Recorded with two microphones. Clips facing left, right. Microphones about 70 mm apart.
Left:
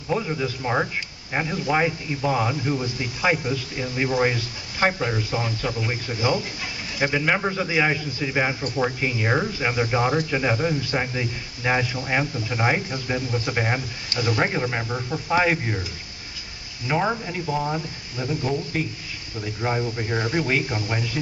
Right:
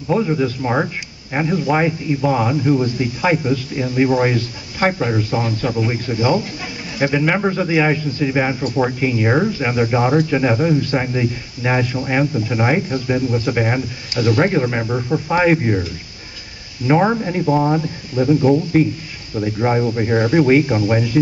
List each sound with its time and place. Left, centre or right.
0.1 s speech: centre
16.8 s speech: right